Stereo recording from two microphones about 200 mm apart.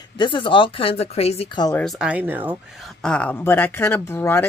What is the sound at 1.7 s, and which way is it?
Speech, centre (ahead or behind).